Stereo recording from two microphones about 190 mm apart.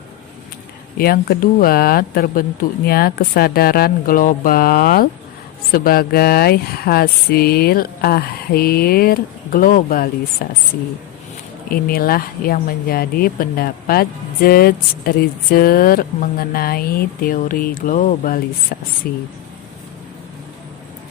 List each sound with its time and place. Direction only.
0.9 s speech: 50° left (ahead or behind)
11.7 s speech: 50° left (ahead or behind)